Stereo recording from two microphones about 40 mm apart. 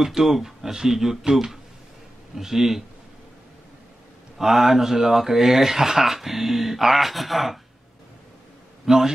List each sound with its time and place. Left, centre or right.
0.0 s speech: centre
2.3 s speech: centre
4.4 s speech: centre
8.8 s a man's voice: centre